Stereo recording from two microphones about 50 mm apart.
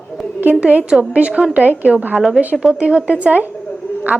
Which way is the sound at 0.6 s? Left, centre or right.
Right.